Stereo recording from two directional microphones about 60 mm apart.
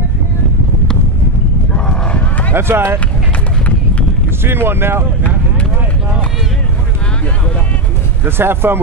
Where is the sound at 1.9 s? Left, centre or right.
Centre.